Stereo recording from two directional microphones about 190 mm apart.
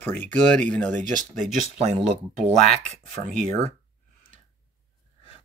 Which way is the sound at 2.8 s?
40° right (ahead or behind).